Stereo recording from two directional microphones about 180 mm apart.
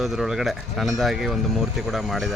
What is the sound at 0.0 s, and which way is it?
A man's voice, centre (ahead or behind).